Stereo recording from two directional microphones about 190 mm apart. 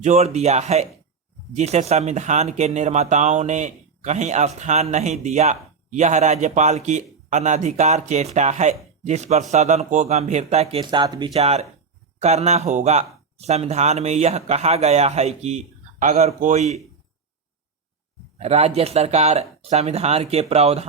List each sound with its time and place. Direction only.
0.0 s speech: 35° right (ahead or behind)
11.3 s speech: 35° right (ahead or behind)
18.3 s speech: 35° right (ahead or behind)